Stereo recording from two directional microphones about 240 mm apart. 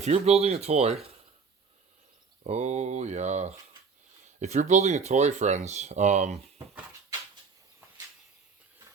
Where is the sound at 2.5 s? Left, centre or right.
Right.